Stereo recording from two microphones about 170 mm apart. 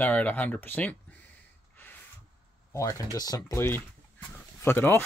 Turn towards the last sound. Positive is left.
turn(degrees=10)  # may be behind; listen again after turning